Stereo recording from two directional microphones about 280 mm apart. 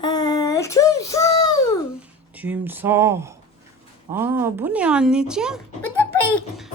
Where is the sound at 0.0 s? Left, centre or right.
Centre.